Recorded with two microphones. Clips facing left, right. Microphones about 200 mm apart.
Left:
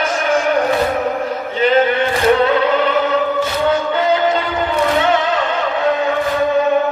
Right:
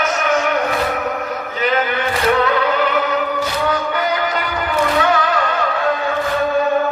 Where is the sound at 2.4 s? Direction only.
25° left (ahead or behind).